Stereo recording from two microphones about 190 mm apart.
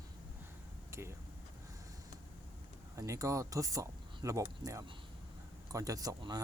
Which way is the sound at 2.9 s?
15° right (ahead or behind).